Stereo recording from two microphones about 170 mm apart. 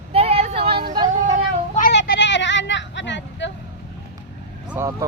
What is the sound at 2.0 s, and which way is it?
Vehicle, 90° left.